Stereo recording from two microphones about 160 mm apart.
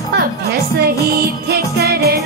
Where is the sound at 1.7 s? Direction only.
85° right.